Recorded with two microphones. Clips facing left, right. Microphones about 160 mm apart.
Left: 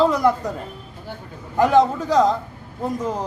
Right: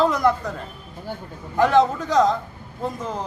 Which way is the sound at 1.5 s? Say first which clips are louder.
Left 1 dB; 10° left (ahead or behind).